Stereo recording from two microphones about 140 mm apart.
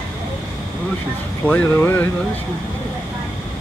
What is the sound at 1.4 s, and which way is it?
Speech, 10° left (ahead or behind).